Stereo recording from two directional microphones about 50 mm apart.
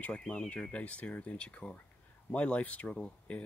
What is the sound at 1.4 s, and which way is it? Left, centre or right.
Speech, centre.